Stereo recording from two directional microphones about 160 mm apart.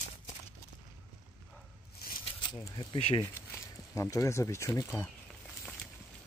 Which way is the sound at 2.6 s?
25° left (ahead or behind).